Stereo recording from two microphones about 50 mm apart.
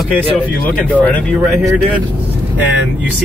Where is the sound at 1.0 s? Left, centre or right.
Left.